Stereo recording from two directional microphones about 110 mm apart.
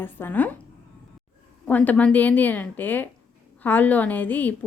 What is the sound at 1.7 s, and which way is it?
A woman's voice, 15° left (ahead or behind).